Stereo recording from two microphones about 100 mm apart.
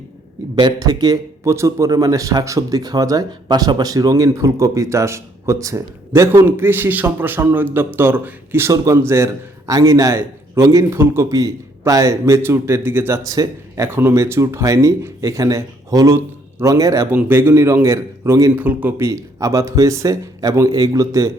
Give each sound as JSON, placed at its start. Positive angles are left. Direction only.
{"t": 0.6, "sound": "speech", "side_deg": -45}
{"t": 1.5, "sound": "a man's voice", "side_deg": -30}
{"t": 17.1, "sound": "a man's voice", "side_deg": -20}
{"t": 18.5, "sound": "speech", "side_deg": -15}
{"t": 18.9, "sound": "speech", "side_deg": -30}